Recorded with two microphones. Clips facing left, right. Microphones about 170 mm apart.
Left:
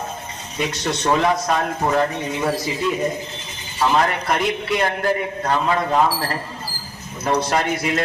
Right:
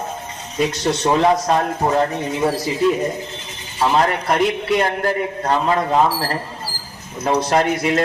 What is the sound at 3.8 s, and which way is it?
Speech, 30° right (ahead or behind).